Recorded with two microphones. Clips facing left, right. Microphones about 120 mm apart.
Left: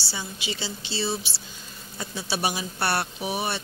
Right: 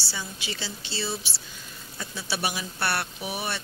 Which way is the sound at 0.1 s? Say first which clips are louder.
Left 2 dB; 20° left (ahead or behind).